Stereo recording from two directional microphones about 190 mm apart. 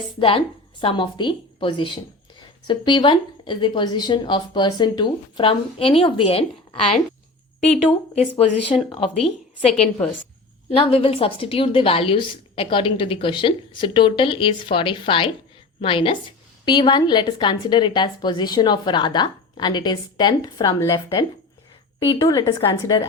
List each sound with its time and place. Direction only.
0.2 s a woman's voice: 25° left (ahead or behind)
8.4 s a woman's voice: 30° left (ahead or behind)